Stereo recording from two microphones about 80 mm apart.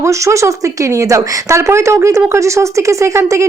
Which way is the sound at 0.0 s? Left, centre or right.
Right.